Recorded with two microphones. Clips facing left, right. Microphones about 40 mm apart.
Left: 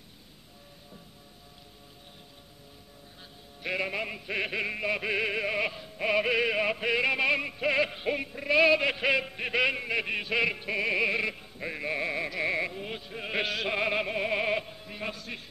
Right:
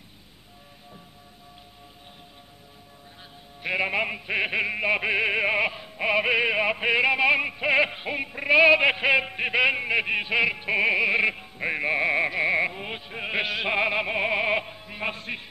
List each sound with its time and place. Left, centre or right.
3.6 s music: right
8.3 s music: right
10.7 s music: right
13.4 s a sound: centre
14.1 s music: right
15.0 s a man's voice: right